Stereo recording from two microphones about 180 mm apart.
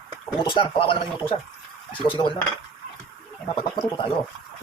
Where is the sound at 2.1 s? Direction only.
25° left (ahead or behind).